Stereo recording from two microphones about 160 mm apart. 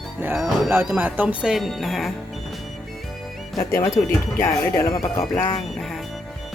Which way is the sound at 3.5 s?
15° left (ahead or behind).